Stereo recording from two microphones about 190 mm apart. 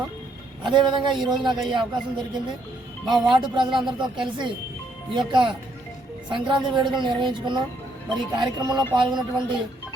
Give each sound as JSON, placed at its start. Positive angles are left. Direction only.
{"t": 0.6, "sound": "speech", "side_deg": -25}